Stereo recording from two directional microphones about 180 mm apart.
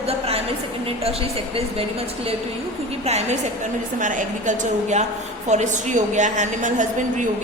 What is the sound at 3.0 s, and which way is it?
A woman's voice, 35° right (ahead or behind).